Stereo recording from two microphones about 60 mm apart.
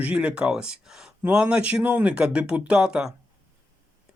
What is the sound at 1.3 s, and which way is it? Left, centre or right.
Speech, centre.